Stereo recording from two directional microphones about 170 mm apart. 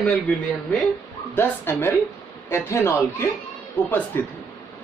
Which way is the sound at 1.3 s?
15° left (ahead or behind).